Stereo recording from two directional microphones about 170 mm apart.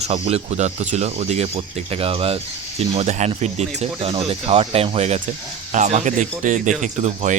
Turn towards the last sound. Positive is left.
turn(degrees=-45)  # may be behind; listen again after turning